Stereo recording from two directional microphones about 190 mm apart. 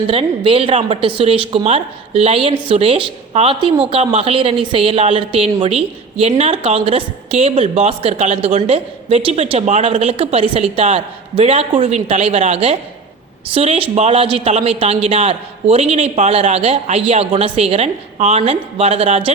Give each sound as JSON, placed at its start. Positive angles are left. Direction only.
{"t": 0.1, "sound": "a woman's voice", "side_deg": -30}